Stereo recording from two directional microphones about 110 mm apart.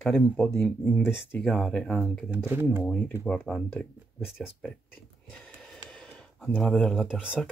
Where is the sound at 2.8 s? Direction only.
10° left (ahead or behind).